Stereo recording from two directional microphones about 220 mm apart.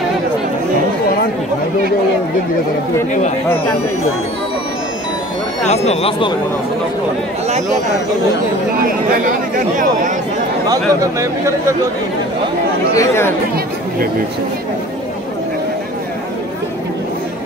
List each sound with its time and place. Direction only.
3.1 s speech: 30° left (ahead or behind)
5.7 s speech: 25° left (ahead or behind)
10.7 s speech: 15° right (ahead or behind)
12.9 s speech: 15° left (ahead or behind)